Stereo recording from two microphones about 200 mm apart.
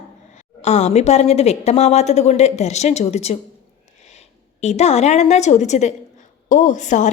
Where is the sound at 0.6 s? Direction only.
35° left (ahead or behind).